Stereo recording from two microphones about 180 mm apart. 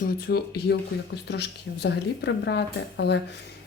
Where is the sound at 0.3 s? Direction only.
60° left (ahead or behind).